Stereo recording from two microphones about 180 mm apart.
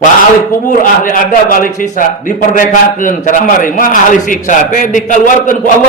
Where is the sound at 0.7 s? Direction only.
50° left (ahead or behind).